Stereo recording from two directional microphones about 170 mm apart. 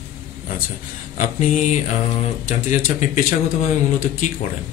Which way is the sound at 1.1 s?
45° left (ahead or behind).